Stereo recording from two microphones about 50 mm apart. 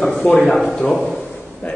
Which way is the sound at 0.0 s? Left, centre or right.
Centre.